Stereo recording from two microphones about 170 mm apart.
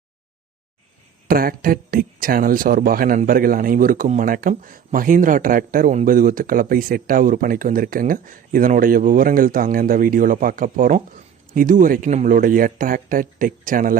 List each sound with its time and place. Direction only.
1.3 s a man's voice: 60° right (ahead or behind)